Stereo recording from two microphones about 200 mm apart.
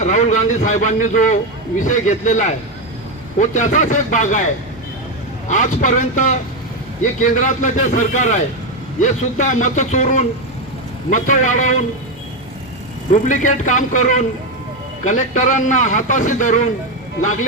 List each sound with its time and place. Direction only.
0.0 s a man's voice: 40° left (ahead or behind)
5.5 s a man's voice: 40° left (ahead or behind)
13.2 s a man's voice: 40° left (ahead or behind)